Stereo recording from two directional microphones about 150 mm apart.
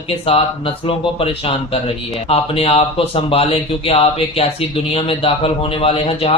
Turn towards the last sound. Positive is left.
turn(degrees=40)  # may be behind; listen again after turning